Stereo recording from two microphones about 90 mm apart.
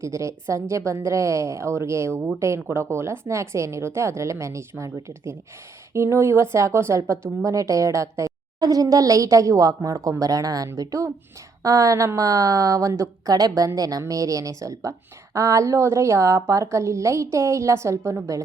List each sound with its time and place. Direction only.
0.0 s a woman's voice: 35° right (ahead or behind)